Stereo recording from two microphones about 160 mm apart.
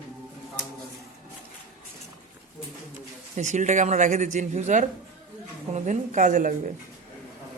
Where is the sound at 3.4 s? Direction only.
50° right (ahead or behind).